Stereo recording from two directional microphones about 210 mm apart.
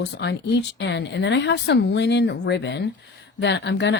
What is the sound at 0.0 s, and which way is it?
Speech, 55° left (ahead or behind).